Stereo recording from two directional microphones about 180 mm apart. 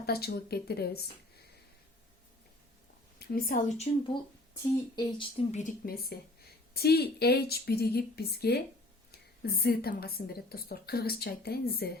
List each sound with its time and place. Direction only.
0.0 s a woman's voice: 60° left (ahead or behind)
3.2 s a woman's voice: 55° left (ahead or behind)
3.9 s speech: 30° left (ahead or behind)
5.5 s speech: 40° left (ahead or behind)
5.8 s a woman's voice: 55° left (ahead or behind)